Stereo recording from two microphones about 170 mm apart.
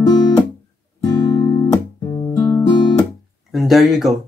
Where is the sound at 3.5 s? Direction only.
Centre (ahead or behind).